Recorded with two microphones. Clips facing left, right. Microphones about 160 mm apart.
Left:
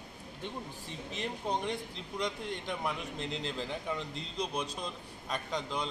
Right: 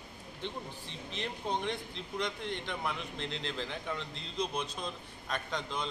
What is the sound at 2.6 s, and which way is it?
Speech, 5° left (ahead or behind).